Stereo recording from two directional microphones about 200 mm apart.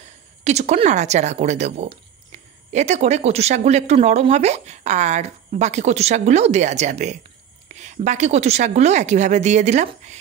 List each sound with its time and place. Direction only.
0.4 s speech: 35° right (ahead or behind)